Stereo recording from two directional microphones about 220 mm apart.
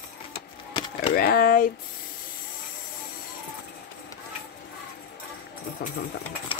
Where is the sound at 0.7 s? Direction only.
25° left (ahead or behind).